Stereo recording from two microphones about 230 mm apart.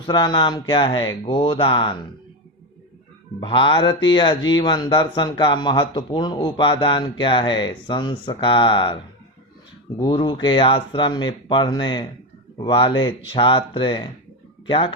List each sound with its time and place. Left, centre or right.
0.0 s speech: centre
3.4 s speech: left
10.0 s speech: centre